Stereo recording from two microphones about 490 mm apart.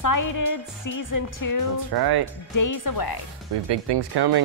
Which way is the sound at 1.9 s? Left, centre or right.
Right.